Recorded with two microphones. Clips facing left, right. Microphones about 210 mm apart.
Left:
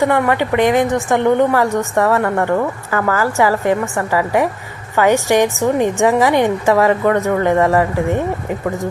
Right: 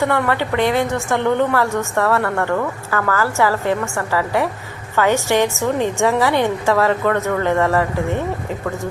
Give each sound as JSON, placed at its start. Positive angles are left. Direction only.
{"t": 0.0, "sound": "a woman's voice", "side_deg": 15}